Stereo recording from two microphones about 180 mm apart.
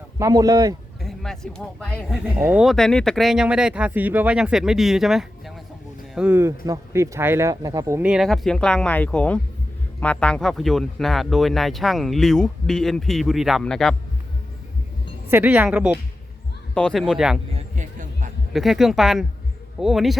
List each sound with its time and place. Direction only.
0.2 s speech: 20° right (ahead or behind)
1.0 s speech: centre (ahead or behind); by 8.1 s 15° right (ahead or behind)
8.1 s speech: centre (ahead or behind)
15.3 s speech: 10° right (ahead or behind)
16.7 s speech: 5° left (ahead or behind)
17.5 s a sound: 45° right (ahead or behind)
18.5 s speech: centre (ahead or behind)